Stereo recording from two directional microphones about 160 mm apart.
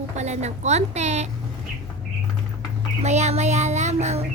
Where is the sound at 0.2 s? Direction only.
45° right (ahead or behind).